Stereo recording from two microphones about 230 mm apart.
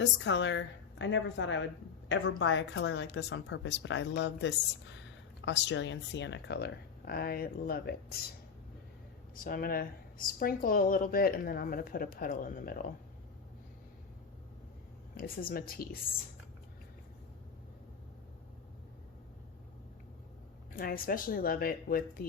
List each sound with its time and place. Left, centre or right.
0.0 s speech: left
9.3 s speech: left
15.1 s speech: left
20.7 s speech: left